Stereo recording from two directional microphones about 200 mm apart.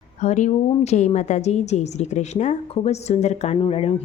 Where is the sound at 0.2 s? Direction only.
35° left (ahead or behind).